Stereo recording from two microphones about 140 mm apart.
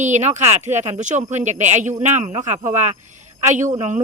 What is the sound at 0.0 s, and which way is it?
Speech, 60° right (ahead or behind).